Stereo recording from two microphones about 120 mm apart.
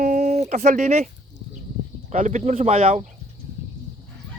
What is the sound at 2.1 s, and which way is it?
Speech, 75° right (ahead or behind).